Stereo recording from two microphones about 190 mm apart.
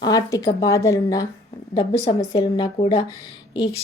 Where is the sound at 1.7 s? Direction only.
30° left (ahead or behind).